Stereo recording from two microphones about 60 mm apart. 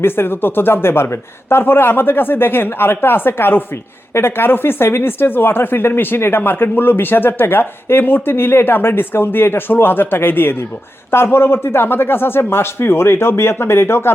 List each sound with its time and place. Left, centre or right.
0.0 s speech: left